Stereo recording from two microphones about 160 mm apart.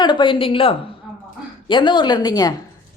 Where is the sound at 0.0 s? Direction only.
30° left (ahead or behind).